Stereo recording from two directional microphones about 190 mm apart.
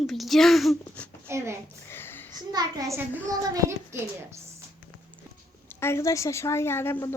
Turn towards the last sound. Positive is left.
turn(degrees=10)  # may be behind; listen again after turning